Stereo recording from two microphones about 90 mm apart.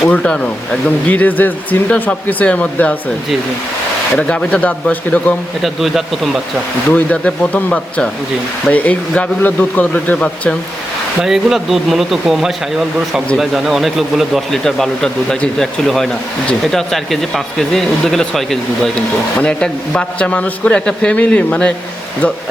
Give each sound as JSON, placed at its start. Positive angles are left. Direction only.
{"t": 0.1, "sound": "speech", "side_deg": 15}
{"t": 4.2, "sound": "speech", "side_deg": 10}
{"t": 5.6, "sound": "speech", "side_deg": 0}
{"t": 6.9, "sound": "speech", "side_deg": 15}
{"t": 11.2, "sound": "speech", "side_deg": -5}